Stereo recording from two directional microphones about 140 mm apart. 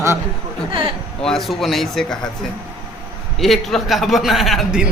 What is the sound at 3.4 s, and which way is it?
A man's voice, centre (ahead or behind).